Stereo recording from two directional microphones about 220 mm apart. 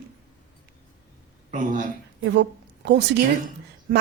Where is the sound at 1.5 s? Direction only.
35° right (ahead or behind).